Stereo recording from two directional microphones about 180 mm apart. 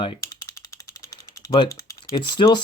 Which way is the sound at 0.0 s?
25° left (ahead or behind).